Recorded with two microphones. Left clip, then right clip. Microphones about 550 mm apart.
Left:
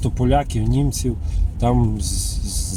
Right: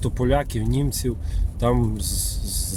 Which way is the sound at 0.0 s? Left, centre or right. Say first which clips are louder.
Left 3 dB; right.